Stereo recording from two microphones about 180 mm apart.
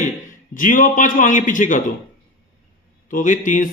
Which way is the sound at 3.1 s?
45° left (ahead or behind).